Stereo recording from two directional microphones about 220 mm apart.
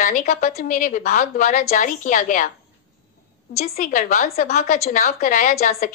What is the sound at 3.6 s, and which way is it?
A woman's voice, 40° left (ahead or behind).